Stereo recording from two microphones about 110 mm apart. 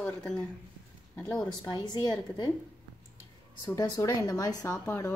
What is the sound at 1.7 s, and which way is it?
Speech, 40° left (ahead or behind).